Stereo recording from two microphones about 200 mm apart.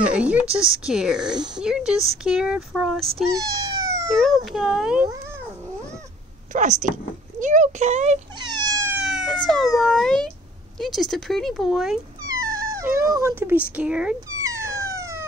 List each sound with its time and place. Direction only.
0.0 s speech: 5° right (ahead or behind)
3.3 s cat: 15° right (ahead or behind)
4.1 s speech: centre (ahead or behind)
6.5 s speech: 40° right (ahead or behind)
8.4 s cat: 20° right (ahead or behind)
9.0 s a sound: centre (ahead or behind)
9.8 s speech: centre (ahead or behind)
12.4 s wail: 45° right (ahead or behind)
12.7 s speech: 15° right (ahead or behind)
14.4 s cat: 15° right (ahead or behind)